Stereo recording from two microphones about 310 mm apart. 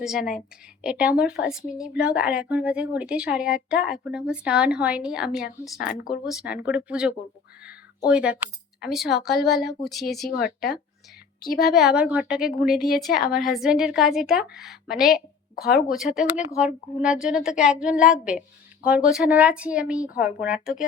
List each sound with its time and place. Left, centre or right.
0.0 s speech: centre
7.6 s a sound: centre
8.8 s speech: centre
10.3 s speech: left
11.7 s speech: centre
13.1 s speech: left
13.4 s speech: centre
15.5 s speech: left
15.9 s speech: centre